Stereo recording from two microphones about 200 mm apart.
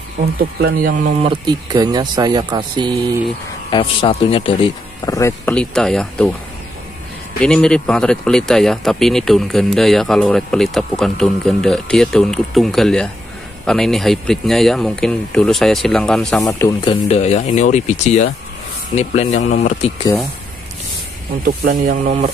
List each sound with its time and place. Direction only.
0.4 s speech: 45° right (ahead or behind)
1.2 s speech: 20° right (ahead or behind)
3.7 s speech: 25° left (ahead or behind); by 6.3 s 5° left (ahead or behind)
7.3 s a man's voice: 5° left (ahead or behind)
16.4 s speech: 15° left (ahead or behind)
16.9 s speech: 30° left (ahead or behind)
21.8 s speech: 35° right (ahead or behind)